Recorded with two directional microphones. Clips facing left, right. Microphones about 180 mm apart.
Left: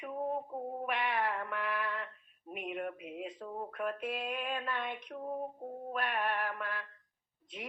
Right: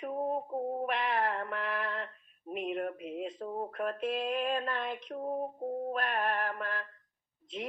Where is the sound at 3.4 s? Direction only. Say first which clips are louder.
Right 2 dB; 35° right (ahead or behind).